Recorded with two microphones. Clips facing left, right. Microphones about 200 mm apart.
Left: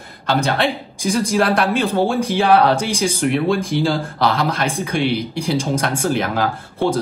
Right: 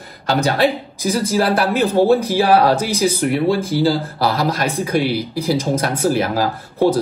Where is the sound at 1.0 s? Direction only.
5° right (ahead or behind).